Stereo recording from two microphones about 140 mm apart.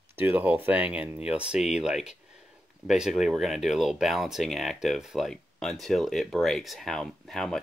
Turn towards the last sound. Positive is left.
turn(degrees=5)  # may be behind; listen again after turning